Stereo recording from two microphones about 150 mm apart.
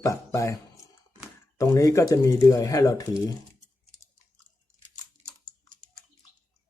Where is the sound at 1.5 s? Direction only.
20° left (ahead or behind).